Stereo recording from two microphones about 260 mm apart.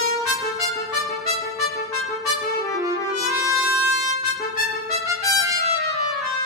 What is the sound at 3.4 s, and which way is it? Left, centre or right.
Music, centre.